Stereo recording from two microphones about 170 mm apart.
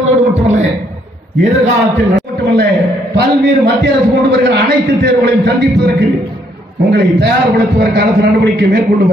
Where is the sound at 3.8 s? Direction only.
75° right (ahead or behind).